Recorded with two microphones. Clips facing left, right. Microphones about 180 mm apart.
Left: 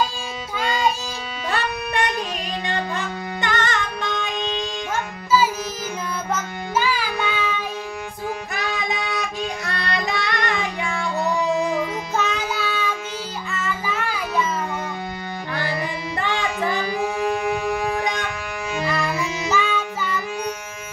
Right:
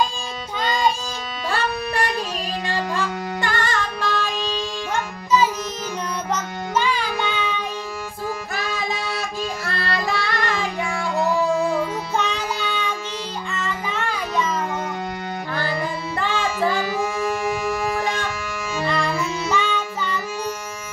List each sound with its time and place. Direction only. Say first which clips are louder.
0.6 s music: right 1 dB; 5° left (ahead or behind)
1.5 s music: right 1 dB; 20° left (ahead or behind)
4.9 s music: even; 5° left (ahead or behind)
6.3 s child singing: even; 5° left (ahead or behind)
8.5 s music: left 1 dB; 20° left (ahead or behind)
12.2 s music: left 2 dB; 5° left (ahead or behind)
13.6 s child singing: left 1 dB; 5° left (ahead or behind)
16.2 s music: right 2 dB; 20° left (ahead or behind)
19.5 s music: left 2 dB; 5° left (ahead or behind)